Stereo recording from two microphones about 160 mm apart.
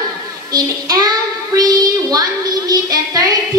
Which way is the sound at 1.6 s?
25° right (ahead or behind).